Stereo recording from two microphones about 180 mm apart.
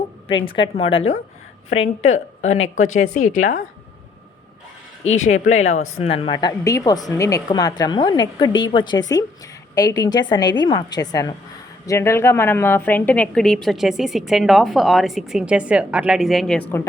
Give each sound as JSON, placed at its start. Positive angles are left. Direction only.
{"t": 0.3, "sound": "a woman's voice", "side_deg": 30}
{"t": 5.2, "sound": "a woman's voice", "side_deg": 40}